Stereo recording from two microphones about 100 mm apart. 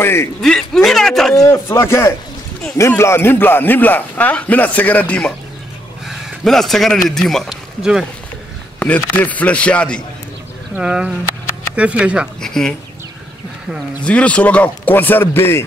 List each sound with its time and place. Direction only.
0.0 s a man's voice: 25° left (ahead or behind)
0.4 s speech: 5° left (ahead or behind)
1.3 s a man's voice: 30° left (ahead or behind); by 5.3 s 15° left (ahead or behind)
6.0 s a man's voice: centre (ahead or behind)
8.7 s a man's voice: 15° left (ahead or behind)
10.8 s speech: 10° right (ahead or behind)
12.4 s speech: 5° left (ahead or behind)
14.0 s a man's voice: 10° left (ahead or behind)